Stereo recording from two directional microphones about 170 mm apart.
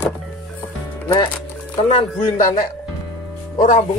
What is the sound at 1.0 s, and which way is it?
Speech, 25° left (ahead or behind).